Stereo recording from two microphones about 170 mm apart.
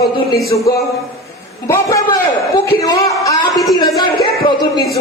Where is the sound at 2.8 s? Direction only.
20° left (ahead or behind).